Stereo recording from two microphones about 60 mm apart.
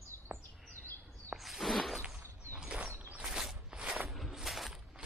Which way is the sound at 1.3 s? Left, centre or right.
Centre.